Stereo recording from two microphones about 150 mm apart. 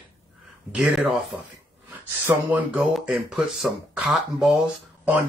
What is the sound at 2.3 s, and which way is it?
Speech, 20° right (ahead or behind).